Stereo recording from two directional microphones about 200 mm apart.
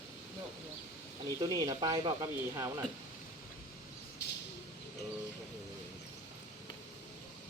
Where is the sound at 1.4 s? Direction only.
20° right (ahead or behind).